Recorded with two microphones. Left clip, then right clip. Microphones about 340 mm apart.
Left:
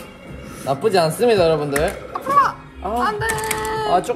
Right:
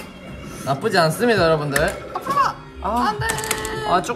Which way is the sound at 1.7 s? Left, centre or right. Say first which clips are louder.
Even; centre.